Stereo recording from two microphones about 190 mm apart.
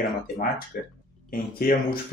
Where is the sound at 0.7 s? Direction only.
55° left (ahead or behind).